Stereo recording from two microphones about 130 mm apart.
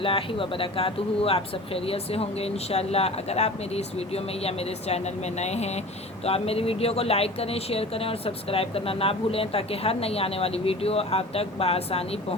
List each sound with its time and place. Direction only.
0.0 s speech: 45° left (ahead or behind)